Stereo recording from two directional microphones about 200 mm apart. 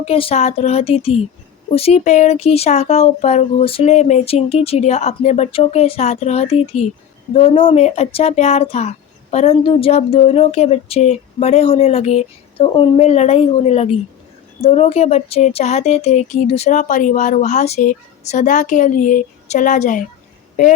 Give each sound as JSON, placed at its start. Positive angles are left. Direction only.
{"t": 0.0, "sound": "speech", "side_deg": 30}